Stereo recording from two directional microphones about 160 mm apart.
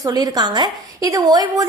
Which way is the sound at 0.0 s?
25° right (ahead or behind).